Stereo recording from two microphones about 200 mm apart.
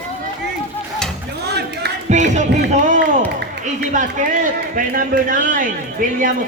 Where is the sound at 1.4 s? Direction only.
55° right (ahead or behind).